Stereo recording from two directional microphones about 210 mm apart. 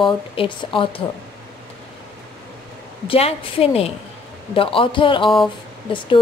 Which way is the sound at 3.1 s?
25° left (ahead or behind).